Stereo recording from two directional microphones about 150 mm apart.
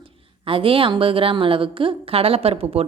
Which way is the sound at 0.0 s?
35° right (ahead or behind).